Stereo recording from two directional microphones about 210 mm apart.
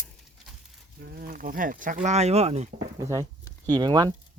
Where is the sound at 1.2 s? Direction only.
40° right (ahead or behind).